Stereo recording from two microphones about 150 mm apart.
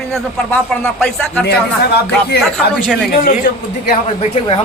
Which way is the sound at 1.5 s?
90° left.